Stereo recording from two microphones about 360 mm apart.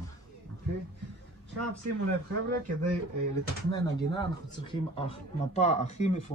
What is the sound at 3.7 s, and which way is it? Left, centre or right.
Speech, centre.